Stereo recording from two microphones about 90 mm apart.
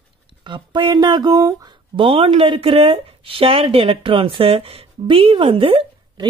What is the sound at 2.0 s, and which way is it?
Speech, 80° right.